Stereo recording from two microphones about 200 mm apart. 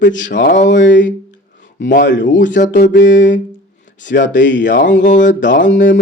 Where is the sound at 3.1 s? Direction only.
40° left (ahead or behind).